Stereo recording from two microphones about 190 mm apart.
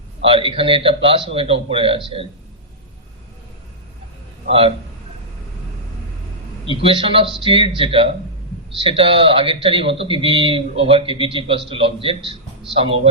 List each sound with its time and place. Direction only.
0.3 s a man's voice: 30° right (ahead or behind)
4.4 s a man's voice: 30° right (ahead or behind)
6.8 s a man's voice: 30° right (ahead or behind)